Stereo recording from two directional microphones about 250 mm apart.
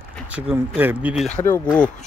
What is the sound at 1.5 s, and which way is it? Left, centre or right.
Speech, centre.